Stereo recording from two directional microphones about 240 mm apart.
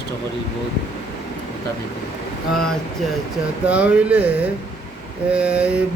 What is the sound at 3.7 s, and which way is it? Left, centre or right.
Speech, centre.